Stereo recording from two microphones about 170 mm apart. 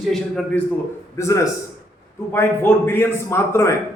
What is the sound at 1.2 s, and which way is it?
A man's voice, 15° left (ahead or behind).